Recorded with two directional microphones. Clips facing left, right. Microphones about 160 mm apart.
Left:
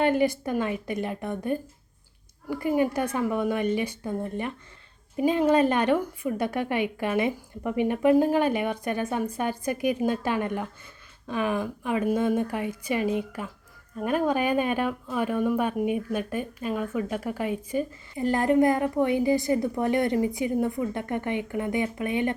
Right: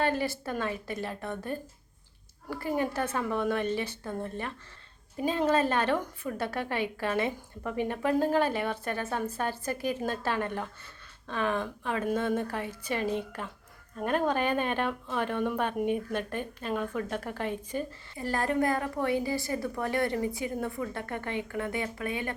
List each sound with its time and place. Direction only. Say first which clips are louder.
0.0 s speech: left 6 dB; 15° left (ahead or behind)